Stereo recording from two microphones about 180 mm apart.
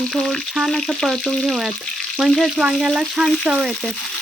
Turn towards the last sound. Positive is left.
turn(degrees=0)  # may be behind; listen again after turning